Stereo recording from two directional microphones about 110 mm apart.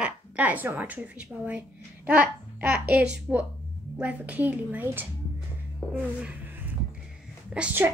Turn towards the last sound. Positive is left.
turn(degrees=-15)  # may be behind; listen again after turning